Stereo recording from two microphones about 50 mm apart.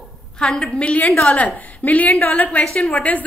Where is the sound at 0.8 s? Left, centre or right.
Left.